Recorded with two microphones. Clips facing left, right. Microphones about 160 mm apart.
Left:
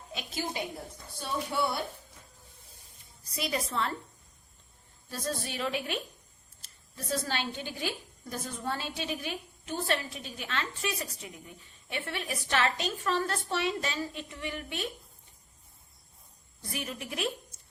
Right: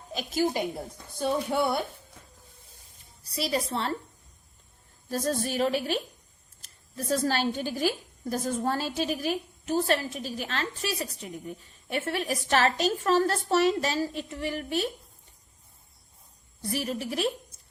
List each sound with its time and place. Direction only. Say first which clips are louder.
0.2 s a woman's voice: right 9 dB; 45° right (ahead or behind)
3.2 s a woman's voice: right 4 dB; 30° right (ahead or behind)
5.0 s a woman's voice: right 7 dB; 45° right (ahead or behind)
16.6 s a woman's voice: right 7 dB; 35° right (ahead or behind)